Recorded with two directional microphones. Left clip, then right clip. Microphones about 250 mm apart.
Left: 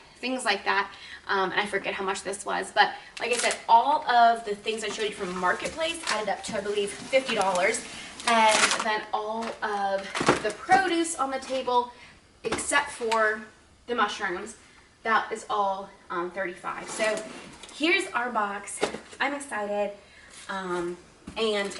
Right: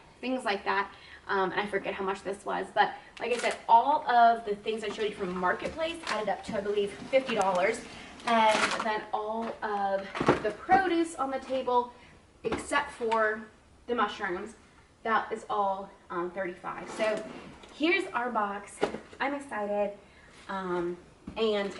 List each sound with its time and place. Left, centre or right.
0.2 s a woman's voice: centre
15.6 s a woman's voice: right
16.0 s a woman's voice: centre